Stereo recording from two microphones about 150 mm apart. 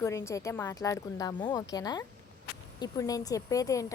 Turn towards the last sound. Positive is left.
turn(degrees=20)  # may be behind; listen again after turning